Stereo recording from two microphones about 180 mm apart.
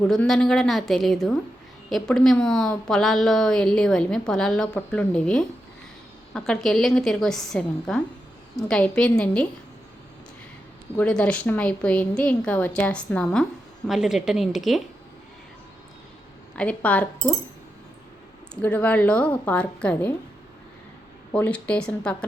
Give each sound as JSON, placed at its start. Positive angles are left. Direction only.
{"t": 0.1, "sound": "a woman's voice", "side_deg": 5}
{"t": 10.9, "sound": "a woman's voice", "side_deg": 5}
{"t": 16.6, "sound": "a woman's voice", "side_deg": 5}
{"t": 18.6, "sound": "a woman's voice", "side_deg": 10}
{"t": 21.3, "sound": "a woman's voice", "side_deg": 10}